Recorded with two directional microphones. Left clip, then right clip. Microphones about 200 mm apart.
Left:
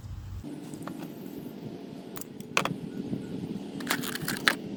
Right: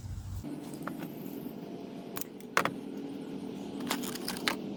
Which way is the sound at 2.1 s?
Centre (ahead or behind).